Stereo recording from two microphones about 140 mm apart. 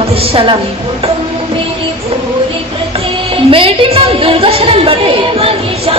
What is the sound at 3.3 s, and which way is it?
A woman's voice, 40° right (ahead or behind).